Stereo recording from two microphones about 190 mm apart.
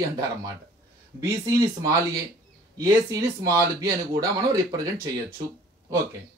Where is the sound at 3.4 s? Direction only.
15° right (ahead or behind).